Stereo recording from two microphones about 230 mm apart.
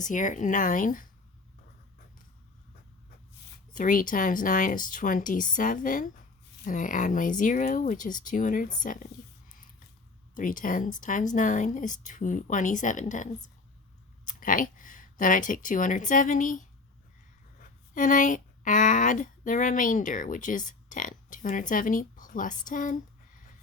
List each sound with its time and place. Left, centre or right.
0.0 s speech: left
3.8 s speech: left
14.3 s speech: left
17.9 s speech: left